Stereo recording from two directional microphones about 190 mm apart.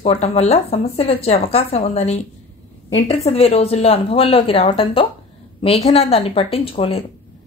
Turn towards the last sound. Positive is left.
turn(degrees=30)  # may be behind; listen again after turning